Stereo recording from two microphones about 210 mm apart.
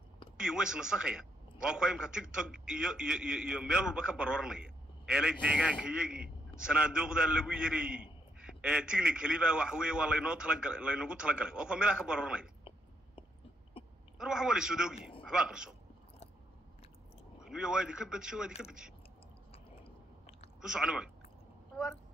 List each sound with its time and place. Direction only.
0.4 s a man's voice: 5° right (ahead or behind)
13.8 s a sound: 25° left (ahead or behind)
14.1 s a man's voice: 5° right (ahead or behind)
17.4 s a man's voice: 5° right (ahead or behind)
20.7 s a man's voice: 5° right (ahead or behind)